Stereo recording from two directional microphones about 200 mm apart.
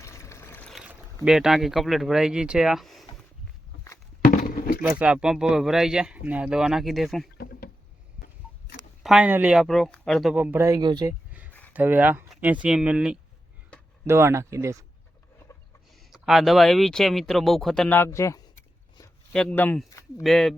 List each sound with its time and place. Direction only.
0.0 s boat: 15° left (ahead or behind)
0.7 s boat: 5° right (ahead or behind)
1.2 s speech: 5° right (ahead or behind)
4.2 s a sound: 40° left (ahead or behind)
4.8 s speech: 10° right (ahead or behind)
7.3 s rowboat: 55° left (ahead or behind)
9.0 s speech: 5° right (ahead or behind)
11.7 s speech: 10° right (ahead or behind)
15.5 s a sound: 15° left (ahead or behind)
16.0 s speech: centre (ahead or behind); by 18.3 s 15° left (ahead or behind)
19.3 s speech: 5° left (ahead or behind)
20.2 s speech: centre (ahead or behind)